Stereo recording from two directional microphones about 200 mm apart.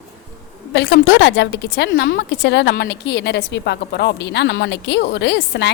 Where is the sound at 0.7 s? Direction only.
60° left (ahead or behind).